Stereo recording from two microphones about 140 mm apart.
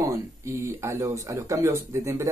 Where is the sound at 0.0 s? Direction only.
20° right (ahead or behind).